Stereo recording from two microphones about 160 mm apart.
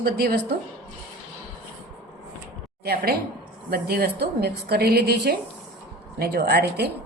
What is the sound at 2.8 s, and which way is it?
A woman's voice, 75° right (ahead or behind).